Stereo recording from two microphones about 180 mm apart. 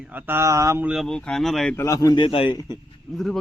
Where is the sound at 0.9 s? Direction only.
Centre (ahead or behind).